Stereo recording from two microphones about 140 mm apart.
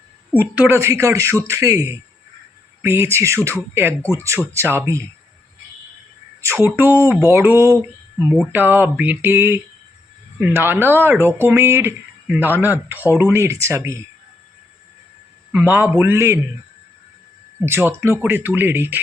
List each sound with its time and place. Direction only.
0.3 s a man's voice: 10° right (ahead or behind)
6.4 s speech: 15° right (ahead or behind)
15.6 s speech: 15° right (ahead or behind)
17.7 s speech: 20° right (ahead or behind)